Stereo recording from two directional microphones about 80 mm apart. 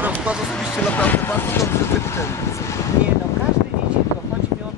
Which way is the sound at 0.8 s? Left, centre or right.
Centre.